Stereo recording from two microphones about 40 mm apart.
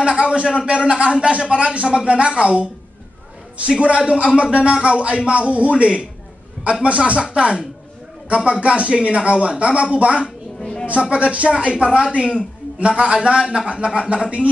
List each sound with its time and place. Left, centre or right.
0.0 s a man's voice: right
8.6 s a man's voice: right
10.6 s a sound: left
10.9 s a man's voice: right